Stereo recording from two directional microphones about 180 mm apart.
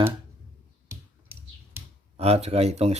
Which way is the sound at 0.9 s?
10° right (ahead or behind).